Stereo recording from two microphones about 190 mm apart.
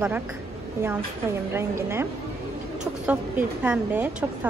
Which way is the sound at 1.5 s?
15° right (ahead or behind).